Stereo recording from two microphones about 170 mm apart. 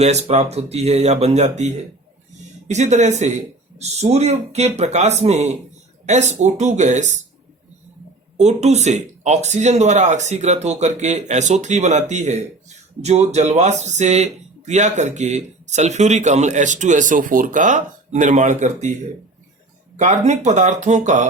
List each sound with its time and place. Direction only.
0.0 s speech: 40° right (ahead or behind)
8.4 s speech: 40° right (ahead or behind)
20.0 s speech: 45° right (ahead or behind)